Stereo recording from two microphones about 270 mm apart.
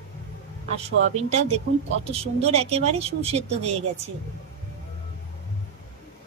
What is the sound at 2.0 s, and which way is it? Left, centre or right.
A woman's voice, right.